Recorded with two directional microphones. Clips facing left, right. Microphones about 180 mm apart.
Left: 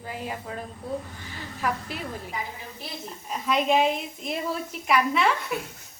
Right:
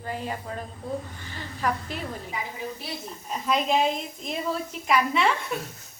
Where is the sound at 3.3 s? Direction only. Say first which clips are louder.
Left 1 dB; centre (ahead or behind).